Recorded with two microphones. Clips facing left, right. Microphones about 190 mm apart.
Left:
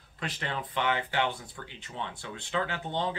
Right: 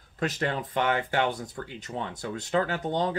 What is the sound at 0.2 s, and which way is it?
Speech, 45° right (ahead or behind).